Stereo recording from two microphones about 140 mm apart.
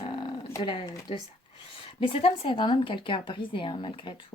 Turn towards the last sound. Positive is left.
turn(degrees=35)  # may be behind; listen again after turning